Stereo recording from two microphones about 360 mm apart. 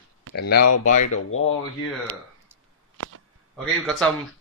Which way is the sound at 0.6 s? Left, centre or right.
Left.